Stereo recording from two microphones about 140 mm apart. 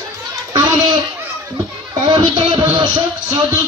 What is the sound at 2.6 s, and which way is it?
Speech, 25° right (ahead or behind).